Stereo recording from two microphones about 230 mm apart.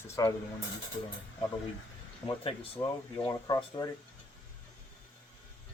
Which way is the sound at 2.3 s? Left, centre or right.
Centre.